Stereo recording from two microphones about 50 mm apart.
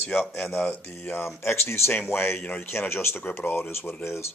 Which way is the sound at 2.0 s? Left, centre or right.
Left.